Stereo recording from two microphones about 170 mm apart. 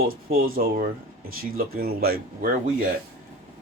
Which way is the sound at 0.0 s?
60° right (ahead or behind).